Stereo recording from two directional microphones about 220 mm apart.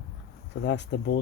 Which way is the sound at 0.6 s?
50° left (ahead or behind).